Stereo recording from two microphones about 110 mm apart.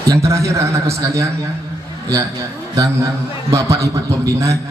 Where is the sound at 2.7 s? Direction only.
30° right (ahead or behind).